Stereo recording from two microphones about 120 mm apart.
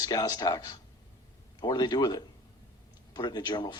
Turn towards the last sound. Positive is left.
turn(degrees=40)  # may be behind; listen again after turning